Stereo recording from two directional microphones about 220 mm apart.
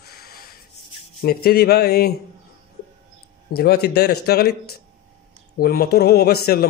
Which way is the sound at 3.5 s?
45° left (ahead or behind).